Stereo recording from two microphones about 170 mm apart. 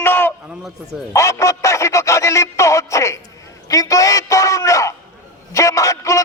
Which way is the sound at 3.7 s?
20° left (ahead or behind).